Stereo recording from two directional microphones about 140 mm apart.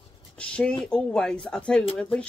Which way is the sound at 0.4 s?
5° left (ahead or behind).